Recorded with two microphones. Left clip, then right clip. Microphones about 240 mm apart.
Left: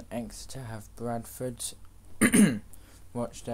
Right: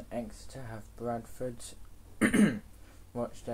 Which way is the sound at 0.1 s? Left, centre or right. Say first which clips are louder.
Left 2 dB; left.